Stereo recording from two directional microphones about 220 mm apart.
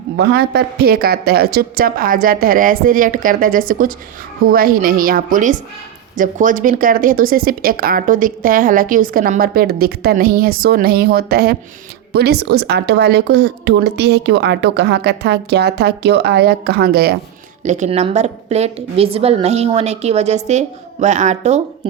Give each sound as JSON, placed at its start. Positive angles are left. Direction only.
{"t": 0.2, "sound": "speech", "side_deg": -50}
{"t": 17.6, "sound": "a woman's voice", "side_deg": -35}